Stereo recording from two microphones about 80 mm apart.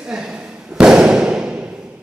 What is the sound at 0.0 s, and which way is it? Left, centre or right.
Thump, centre.